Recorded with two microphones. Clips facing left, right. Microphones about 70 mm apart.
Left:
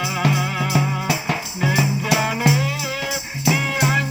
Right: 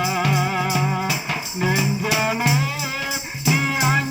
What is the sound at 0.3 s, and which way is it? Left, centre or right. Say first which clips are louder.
Music: even; centre.